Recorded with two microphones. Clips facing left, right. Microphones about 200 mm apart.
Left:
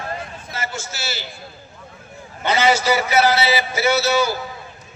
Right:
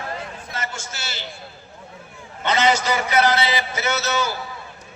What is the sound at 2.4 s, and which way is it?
A man's voice, 10° left (ahead or behind).